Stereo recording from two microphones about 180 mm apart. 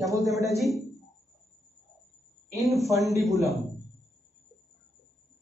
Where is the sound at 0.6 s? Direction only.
Centre (ahead or behind).